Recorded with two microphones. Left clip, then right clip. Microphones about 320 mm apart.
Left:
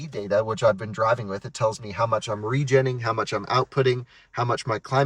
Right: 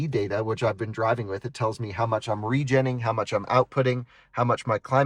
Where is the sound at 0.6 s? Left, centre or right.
Right.